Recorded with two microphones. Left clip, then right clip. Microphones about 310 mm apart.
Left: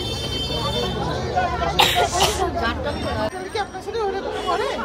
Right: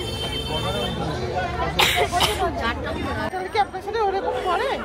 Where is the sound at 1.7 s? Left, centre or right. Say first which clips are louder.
Left 1 dB; centre.